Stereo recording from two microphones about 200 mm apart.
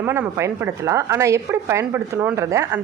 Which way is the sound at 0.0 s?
10° right (ahead or behind).